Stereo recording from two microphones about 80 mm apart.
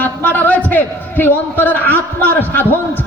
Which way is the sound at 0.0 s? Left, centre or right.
Left.